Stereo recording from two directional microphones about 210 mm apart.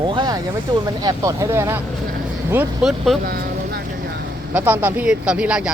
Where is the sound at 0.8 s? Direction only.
15° right (ahead or behind); by 3.2 s centre (ahead or behind).